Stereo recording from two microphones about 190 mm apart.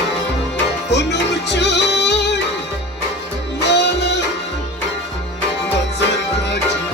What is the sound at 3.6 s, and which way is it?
Music, 65° left (ahead or behind).